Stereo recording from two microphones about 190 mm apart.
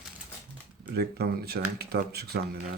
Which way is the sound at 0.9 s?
55° right (ahead or behind).